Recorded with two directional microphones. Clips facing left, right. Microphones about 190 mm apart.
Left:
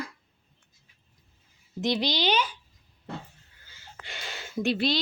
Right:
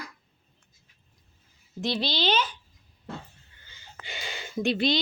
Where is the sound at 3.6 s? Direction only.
Centre (ahead or behind).